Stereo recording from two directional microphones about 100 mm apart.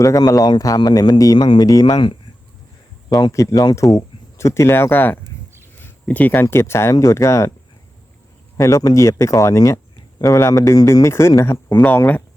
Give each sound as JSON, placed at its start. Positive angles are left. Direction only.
{"t": 0.0, "sound": "a man's voice", "side_deg": 35}
{"t": 3.1, "sound": "a man's voice", "side_deg": 45}
{"t": 3.9, "sound": "speech", "side_deg": 30}
{"t": 8.5, "sound": "speech", "side_deg": 35}